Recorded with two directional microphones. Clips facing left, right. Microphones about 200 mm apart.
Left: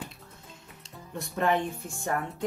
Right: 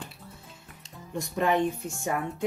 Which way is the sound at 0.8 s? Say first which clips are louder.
Right 4 dB; 15° right (ahead or behind).